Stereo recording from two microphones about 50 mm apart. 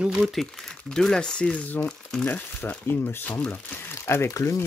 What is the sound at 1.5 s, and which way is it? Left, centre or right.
Speech, left.